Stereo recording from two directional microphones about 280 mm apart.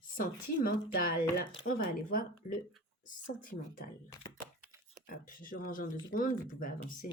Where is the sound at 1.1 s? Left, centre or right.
Left.